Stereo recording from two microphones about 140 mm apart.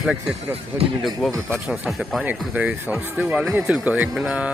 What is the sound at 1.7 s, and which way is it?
Speech, centre (ahead or behind).